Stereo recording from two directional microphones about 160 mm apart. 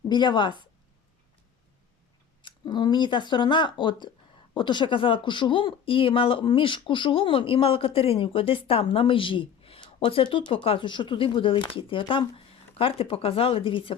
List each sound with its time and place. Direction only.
0.1 s speech: 25° left (ahead or behind)
2.4 s speech: 25° left (ahead or behind)